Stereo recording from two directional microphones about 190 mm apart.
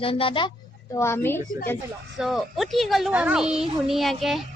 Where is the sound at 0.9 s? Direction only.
15° left (ahead or behind).